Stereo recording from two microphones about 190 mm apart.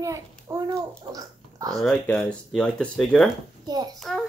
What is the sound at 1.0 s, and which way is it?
Babbling, 20° right (ahead or behind).